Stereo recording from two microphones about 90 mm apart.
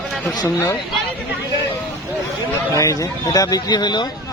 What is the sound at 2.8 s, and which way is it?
Speech, 40° left (ahead or behind).